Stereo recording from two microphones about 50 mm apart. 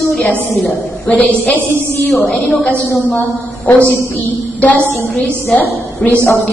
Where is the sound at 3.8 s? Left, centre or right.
Left.